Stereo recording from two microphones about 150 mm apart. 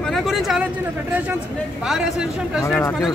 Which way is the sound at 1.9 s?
5° right (ahead or behind).